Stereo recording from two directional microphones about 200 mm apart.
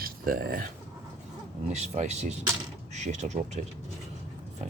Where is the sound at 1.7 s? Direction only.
35° right (ahead or behind).